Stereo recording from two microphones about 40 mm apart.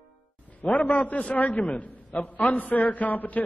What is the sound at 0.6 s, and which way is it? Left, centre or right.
Speech, left.